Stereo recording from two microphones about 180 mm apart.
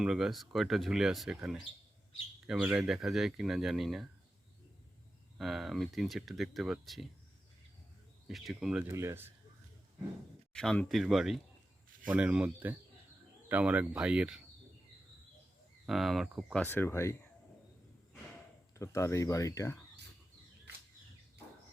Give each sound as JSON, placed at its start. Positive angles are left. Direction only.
{"t": 0.0, "sound": "speech", "side_deg": 0}
{"t": 5.4, "sound": "speech", "side_deg": 0}
{"t": 8.3, "sound": "speech", "side_deg": 0}
{"t": 8.9, "sound": "speech", "side_deg": -15}
{"t": 10.5, "sound": "speech", "side_deg": 5}
{"t": 15.9, "sound": "speech", "side_deg": 0}
{"t": 16.6, "sound": "speech", "side_deg": 10}
{"t": 18.7, "sound": "speech", "side_deg": 15}